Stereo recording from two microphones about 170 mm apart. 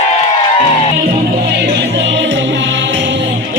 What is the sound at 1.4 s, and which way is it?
Music, 85° right.